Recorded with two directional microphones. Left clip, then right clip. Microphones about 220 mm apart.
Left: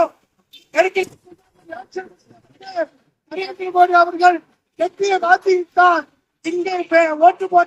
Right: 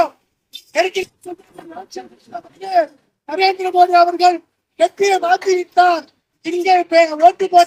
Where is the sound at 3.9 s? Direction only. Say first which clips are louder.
Right 1 dB; 5° left (ahead or behind).